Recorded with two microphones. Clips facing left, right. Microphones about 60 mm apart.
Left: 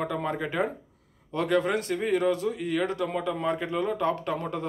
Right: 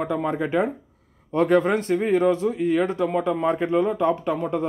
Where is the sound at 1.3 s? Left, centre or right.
Right.